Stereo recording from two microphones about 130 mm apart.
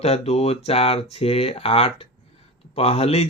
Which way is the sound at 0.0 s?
55° left (ahead or behind).